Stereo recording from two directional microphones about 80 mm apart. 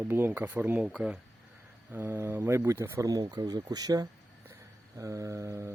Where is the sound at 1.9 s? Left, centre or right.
Right.